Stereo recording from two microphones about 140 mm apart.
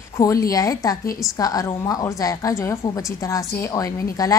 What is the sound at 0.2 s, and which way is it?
A woman's voice, 25° left (ahead or behind).